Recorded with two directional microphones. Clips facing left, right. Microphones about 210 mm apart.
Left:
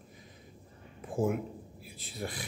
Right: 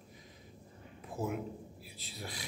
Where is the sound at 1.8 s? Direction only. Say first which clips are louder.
Left 11 dB; 50° left (ahead or behind).